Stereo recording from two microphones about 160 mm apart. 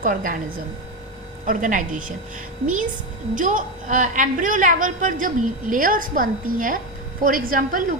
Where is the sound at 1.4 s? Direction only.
55° right (ahead or behind).